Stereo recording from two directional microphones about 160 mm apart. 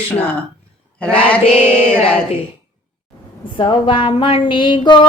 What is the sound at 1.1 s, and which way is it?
Mantra, 10° left (ahead or behind).